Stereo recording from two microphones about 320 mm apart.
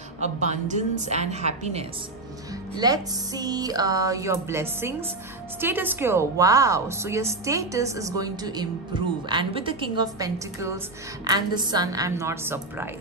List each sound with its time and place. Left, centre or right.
0.2 s a woman's voice: right